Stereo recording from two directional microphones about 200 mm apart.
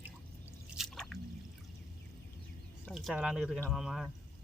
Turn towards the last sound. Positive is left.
turn(degrees=0)  # may be behind; listen again after turning